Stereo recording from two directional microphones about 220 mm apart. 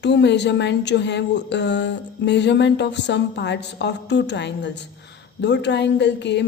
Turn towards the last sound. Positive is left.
turn(degrees=55)  # may be behind; listen again after turning